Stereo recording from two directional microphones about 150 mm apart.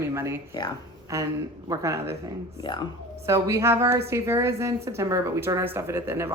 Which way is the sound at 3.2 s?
20° right (ahead or behind).